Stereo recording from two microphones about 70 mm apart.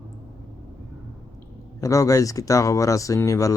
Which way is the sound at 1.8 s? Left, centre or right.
Left.